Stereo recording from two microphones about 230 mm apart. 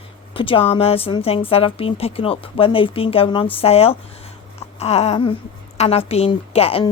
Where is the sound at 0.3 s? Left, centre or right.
Left.